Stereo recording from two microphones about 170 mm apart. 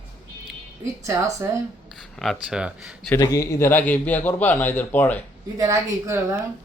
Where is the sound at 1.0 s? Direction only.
15° right (ahead or behind).